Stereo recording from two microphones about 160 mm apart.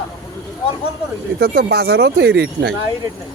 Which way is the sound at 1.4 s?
85° right.